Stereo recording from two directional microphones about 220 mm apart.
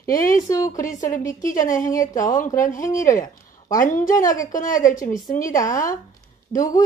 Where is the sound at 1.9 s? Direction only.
15° left (ahead or behind).